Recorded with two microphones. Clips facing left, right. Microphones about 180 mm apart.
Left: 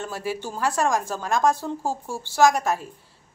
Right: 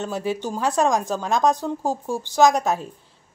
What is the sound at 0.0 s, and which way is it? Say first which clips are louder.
A woman's voice: right 4 dB; 20° right (ahead or behind).